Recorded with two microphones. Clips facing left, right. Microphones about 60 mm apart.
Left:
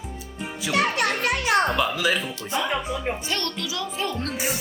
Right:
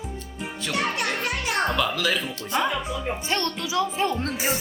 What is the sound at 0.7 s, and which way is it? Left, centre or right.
Speech, left.